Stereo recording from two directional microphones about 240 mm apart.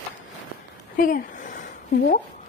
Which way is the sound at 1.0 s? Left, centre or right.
Left.